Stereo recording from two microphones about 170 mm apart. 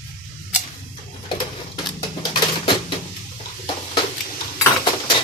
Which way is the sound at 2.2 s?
30° left (ahead or behind).